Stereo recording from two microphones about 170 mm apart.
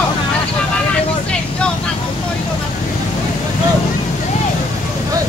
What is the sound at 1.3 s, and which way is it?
Vehicle, 5° left (ahead or behind).